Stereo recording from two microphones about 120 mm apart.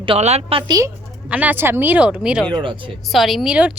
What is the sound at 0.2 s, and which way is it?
Speech, 65° right (ahead or behind).